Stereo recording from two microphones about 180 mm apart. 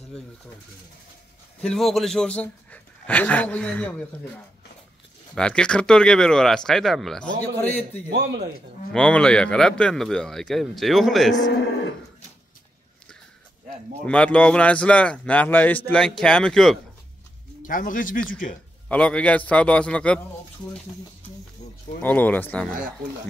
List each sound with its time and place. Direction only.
1.6 s speech: centre (ahead or behind)
5.3 s speech: 5° left (ahead or behind)
8.1 s speech: 65° right (ahead or behind)
8.9 s speech: 5° left (ahead or behind)
14.0 s speech: 5° left (ahead or behind)
17.6 s speech: 50° left (ahead or behind)
18.9 s speech: 5° left (ahead or behind)
22.0 s speech: 10° left (ahead or behind)